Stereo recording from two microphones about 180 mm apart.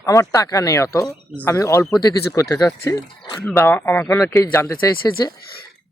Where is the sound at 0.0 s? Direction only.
20° left (ahead or behind).